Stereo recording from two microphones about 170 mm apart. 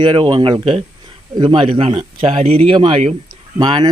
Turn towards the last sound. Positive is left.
turn(degrees=-25)  # may be behind; listen again after turning